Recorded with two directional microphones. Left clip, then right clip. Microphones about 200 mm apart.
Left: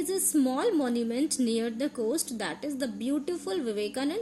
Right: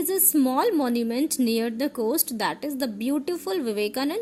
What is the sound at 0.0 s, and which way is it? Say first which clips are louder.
A woman's voice: right 4 dB; 40° right (ahead or behind).